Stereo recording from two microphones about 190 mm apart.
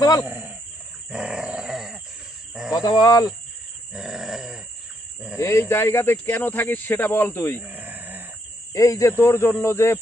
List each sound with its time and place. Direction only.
0.2 s speech: 10° right (ahead or behind)
1.1 s dog: 5° right (ahead or behind)
2.6 s a sound: 5° right (ahead or behind)
3.0 s speech: 20° left (ahead or behind)
3.9 s dog: 5° right (ahead or behind)
5.4 s speech: 15° left (ahead or behind)
7.6 s grunt: 10° right (ahead or behind)
8.7 s speech: 15° left (ahead or behind)